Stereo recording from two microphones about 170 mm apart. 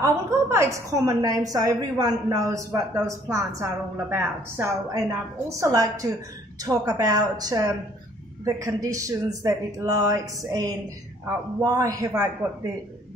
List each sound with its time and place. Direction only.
0.0 s a woman's voice: 15° right (ahead or behind)